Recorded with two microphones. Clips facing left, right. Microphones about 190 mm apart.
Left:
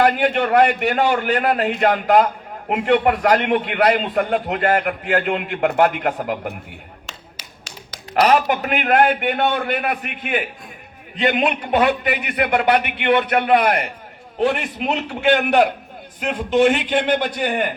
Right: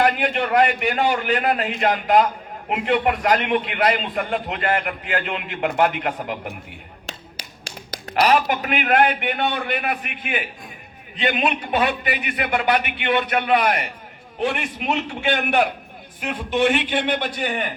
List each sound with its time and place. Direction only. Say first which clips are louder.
0.0 s a man's voice: left 3 dB; 45° left (ahead or behind)
8.4 s a man's voice: left 2 dB; 45° left (ahead or behind)
14.3 s a man's voice: left 4 dB; 40° left (ahead or behind)
15.2 s a man's voice: left 6 dB; 60° left (ahead or behind)
16.3 s a man's voice: left 4 dB; 45° left (ahead or behind)